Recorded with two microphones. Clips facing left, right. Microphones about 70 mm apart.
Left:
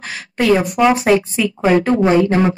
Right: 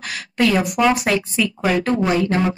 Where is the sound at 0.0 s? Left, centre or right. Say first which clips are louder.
Left 1 dB; left.